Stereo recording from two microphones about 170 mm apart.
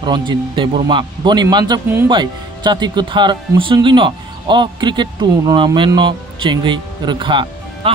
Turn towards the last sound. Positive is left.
turn(degrees=-30)  # may be behind; listen again after turning